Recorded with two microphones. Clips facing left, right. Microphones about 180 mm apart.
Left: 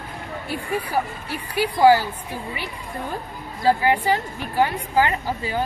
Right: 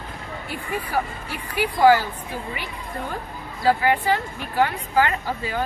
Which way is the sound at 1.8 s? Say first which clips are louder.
Left 1 dB; 15° left (ahead or behind).